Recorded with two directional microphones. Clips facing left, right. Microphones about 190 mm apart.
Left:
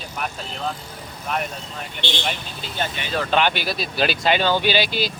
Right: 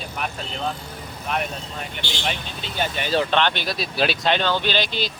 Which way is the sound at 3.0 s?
45° right (ahead or behind).